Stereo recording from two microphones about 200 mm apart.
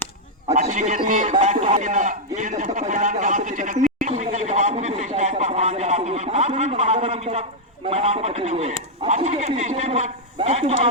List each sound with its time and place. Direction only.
0.4 s a man's voice: 35° right (ahead or behind)
4.0 s a sound: 40° right (ahead or behind)
7.9 s a man's voice: 30° right (ahead or behind)